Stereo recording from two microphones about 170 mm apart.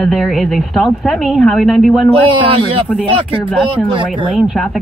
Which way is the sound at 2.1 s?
30° right (ahead or behind).